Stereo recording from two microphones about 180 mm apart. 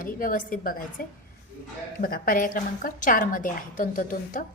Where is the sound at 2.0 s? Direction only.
50° left (ahead or behind).